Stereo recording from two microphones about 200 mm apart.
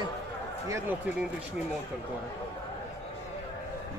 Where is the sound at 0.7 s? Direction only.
15° right (ahead or behind).